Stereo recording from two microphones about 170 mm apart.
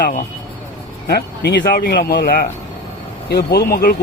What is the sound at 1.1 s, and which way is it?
Speech, 80° left.